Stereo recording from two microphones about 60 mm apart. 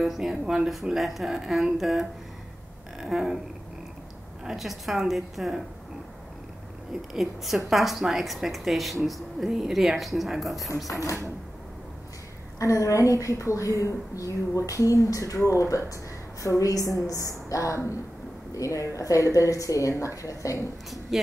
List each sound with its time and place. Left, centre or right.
0.0 s a woman's voice: centre
3.0 s a sound: centre
4.5 s a woman's voice: centre
7.2 s a woman's voice: centre
12.5 s a woman's voice: left
21.1 s speech: centre